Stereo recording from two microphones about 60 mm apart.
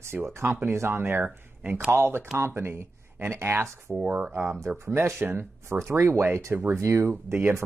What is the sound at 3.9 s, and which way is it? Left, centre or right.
Speech, centre.